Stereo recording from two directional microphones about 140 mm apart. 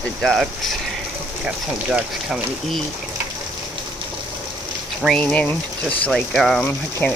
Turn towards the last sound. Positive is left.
turn(degrees=10)  # may be behind; listen again after turning